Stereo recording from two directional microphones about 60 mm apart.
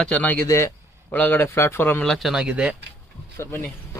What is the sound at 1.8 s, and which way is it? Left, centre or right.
Speech, left.